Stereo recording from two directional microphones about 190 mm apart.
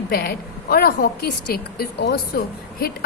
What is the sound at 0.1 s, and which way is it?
A woman's voice, 50° left (ahead or behind).